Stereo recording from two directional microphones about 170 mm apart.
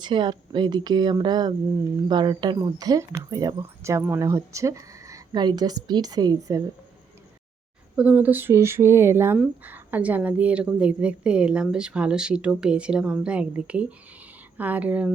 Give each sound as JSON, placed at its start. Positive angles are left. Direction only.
{"t": 0.0, "sound": "speech", "side_deg": -25}
{"t": 7.9, "sound": "a woman's voice", "side_deg": -10}